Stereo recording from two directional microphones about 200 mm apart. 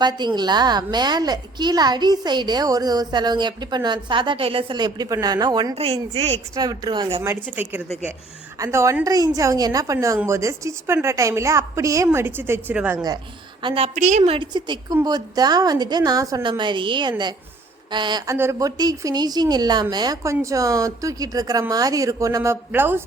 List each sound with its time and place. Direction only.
0.0 s a woman's voice: 20° right (ahead or behind)
5.7 s speech: 30° right (ahead or behind)
6.6 s a woman's voice: 20° right (ahead or behind)
7.2 s a woman's voice: 10° right (ahead or behind)
13.6 s a woman's voice: 25° right (ahead or behind); by 23.0 s 10° right (ahead or behind)